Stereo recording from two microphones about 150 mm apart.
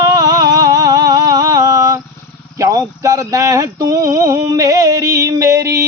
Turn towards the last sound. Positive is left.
turn(degrees=-20)  # may be behind; listen again after turning